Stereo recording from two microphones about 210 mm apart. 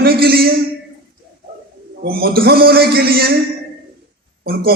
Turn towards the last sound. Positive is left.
turn(degrees=-45)  # may be behind; listen again after turning